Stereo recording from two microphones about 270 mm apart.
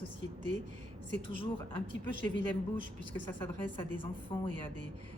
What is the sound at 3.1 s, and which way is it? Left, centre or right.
A woman's voice, centre.